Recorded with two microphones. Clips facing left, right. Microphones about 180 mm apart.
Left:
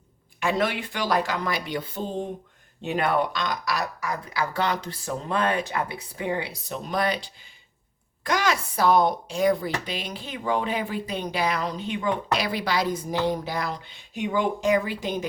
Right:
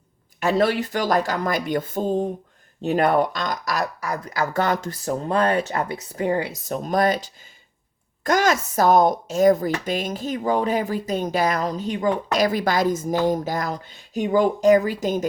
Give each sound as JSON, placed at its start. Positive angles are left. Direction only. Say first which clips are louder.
{"t": 0.3, "sound": "speech", "louder": "right 5 dB", "side_deg": -40}